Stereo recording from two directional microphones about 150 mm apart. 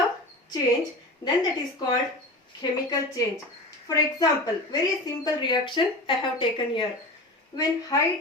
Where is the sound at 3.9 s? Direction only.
25° left (ahead or behind).